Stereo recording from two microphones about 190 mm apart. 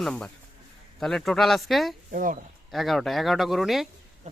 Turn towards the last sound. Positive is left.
turn(degrees=0)  # may be behind; listen again after turning